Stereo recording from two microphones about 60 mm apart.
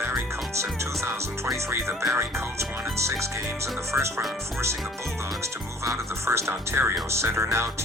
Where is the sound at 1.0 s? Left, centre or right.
Right.